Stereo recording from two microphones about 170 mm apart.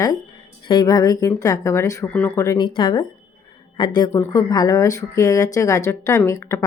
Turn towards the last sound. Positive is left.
turn(degrees=15)  # may be behind; listen again after turning